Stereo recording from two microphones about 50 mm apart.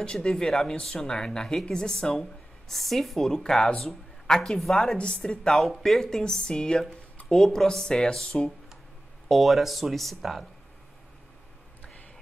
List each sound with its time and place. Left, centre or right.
0.0 s a woman's voice: centre
9.3 s speech: centre